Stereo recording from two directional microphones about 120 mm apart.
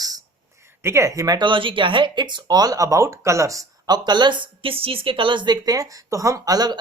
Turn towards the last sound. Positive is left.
turn(degrees=-35)  # may be behind; listen again after turning